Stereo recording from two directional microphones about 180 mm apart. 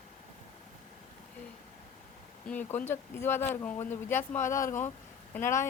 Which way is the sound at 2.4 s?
10° left (ahead or behind).